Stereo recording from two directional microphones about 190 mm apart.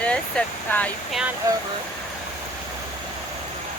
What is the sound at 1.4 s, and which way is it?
Speech, 15° right (ahead or behind).